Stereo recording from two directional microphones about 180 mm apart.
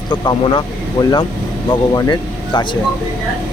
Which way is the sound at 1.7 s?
20° left (ahead or behind).